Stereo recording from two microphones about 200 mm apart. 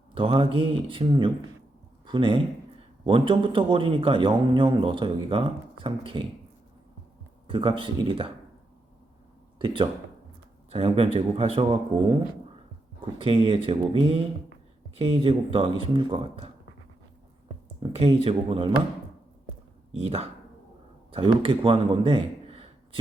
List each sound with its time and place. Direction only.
0.1 s a man's voice: 25° right (ahead or behind)
7.4 s a man's voice: 25° right (ahead or behind)
9.6 s a man's voice: 25° right (ahead or behind)
17.9 s a man's voice: 30° right (ahead or behind)
19.9 s a man's voice: 30° right (ahead or behind)